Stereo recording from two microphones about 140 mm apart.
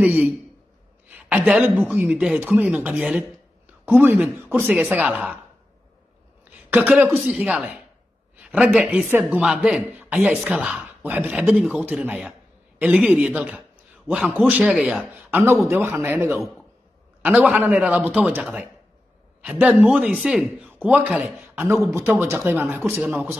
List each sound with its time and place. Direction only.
0.0 s a man's voice: 10° right (ahead or behind)
6.7 s a man's voice: 10° right (ahead or behind)
8.4 s a sound: 10° right (ahead or behind)
8.6 s a man's voice: 5° right (ahead or behind)
22.9 s a man's voice: 5° right (ahead or behind)